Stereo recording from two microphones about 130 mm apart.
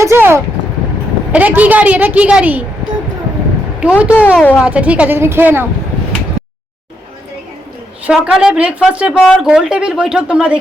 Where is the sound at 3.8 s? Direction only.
10° right (ahead or behind).